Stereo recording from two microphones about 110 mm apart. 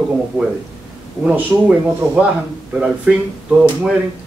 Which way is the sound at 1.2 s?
10° right (ahead or behind).